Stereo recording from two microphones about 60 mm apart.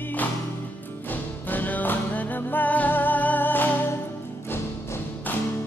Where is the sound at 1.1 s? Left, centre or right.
Left.